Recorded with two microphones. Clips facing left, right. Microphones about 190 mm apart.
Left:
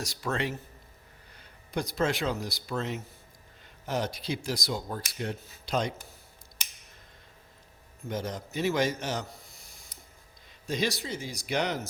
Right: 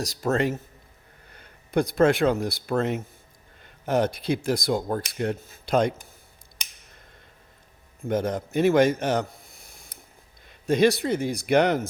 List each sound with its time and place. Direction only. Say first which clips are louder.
0.0 s speech: right 8 dB; 40° right (ahead or behind)
1.3 s speech: right 9 dB; 55° right (ahead or behind)
8.0 s speech: right 9 dB; 55° right (ahead or behind)
9.6 s a sound: right 3 dB; 55° right (ahead or behind)
10.7 s speech: right 11 dB; 60° right (ahead or behind)